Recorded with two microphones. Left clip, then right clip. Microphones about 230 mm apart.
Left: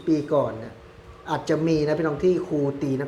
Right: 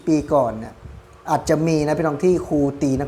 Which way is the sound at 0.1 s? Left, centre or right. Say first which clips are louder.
Right 4 dB; right.